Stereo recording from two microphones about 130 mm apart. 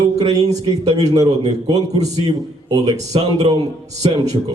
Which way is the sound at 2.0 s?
60° right (ahead or behind).